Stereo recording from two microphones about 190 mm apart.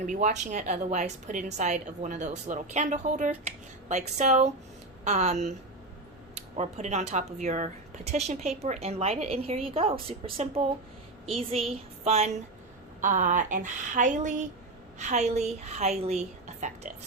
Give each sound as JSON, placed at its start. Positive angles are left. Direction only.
{"t": 0.0, "sound": "a woman's voice", "side_deg": -40}
{"t": 6.6, "sound": "a woman's voice", "side_deg": -35}
{"t": 12.0, "sound": "a woman's voice", "side_deg": -35}